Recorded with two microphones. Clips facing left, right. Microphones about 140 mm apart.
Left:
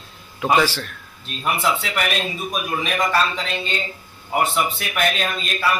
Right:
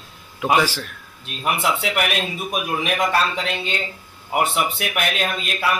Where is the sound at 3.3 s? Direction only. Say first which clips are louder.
Right 1 dB; 70° right (ahead or behind).